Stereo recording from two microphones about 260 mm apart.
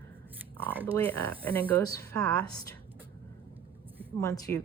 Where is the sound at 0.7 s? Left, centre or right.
Centre.